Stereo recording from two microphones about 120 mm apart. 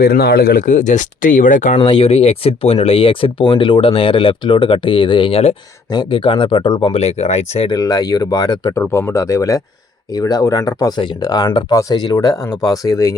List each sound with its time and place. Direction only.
0.6 s speech: 90° left
1.8 s speech: 50° left (ahead or behind)
5.9 s speech: 45° left (ahead or behind)
6.9 s speech: 60° left (ahead or behind)
7.7 s speech: 30° left (ahead or behind)
8.7 s speech: 20° left (ahead or behind)